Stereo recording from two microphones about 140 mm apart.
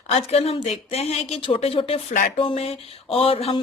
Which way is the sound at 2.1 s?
70° left (ahead or behind).